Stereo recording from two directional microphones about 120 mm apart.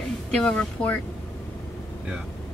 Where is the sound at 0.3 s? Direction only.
5° left (ahead or behind).